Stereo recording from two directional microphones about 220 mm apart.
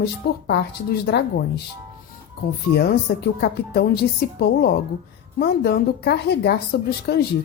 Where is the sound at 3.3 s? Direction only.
45° left (ahead or behind).